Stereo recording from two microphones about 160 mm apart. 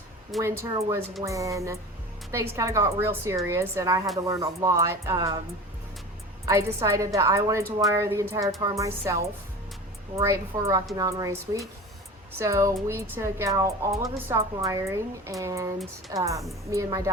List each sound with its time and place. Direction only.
0.4 s speech: 15° right (ahead or behind)
6.4 s speech: 20° right (ahead or behind)